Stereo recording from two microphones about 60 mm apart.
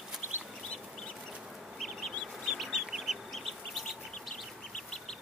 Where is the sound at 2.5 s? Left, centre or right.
Centre.